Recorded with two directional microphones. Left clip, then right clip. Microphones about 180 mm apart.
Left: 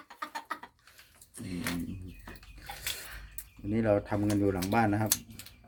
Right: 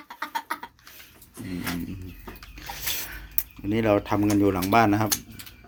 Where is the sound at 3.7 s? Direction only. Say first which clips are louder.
Right 6 dB; 5° left (ahead or behind).